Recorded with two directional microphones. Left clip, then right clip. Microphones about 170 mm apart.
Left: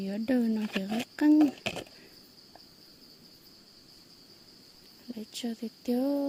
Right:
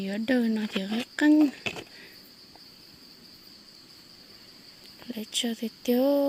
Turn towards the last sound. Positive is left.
turn(degrees=-5)  # may be behind; listen again after turning